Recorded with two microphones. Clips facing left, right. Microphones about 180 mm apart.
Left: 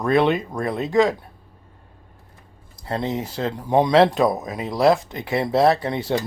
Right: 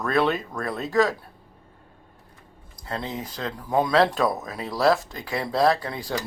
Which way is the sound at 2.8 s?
25° left (ahead or behind).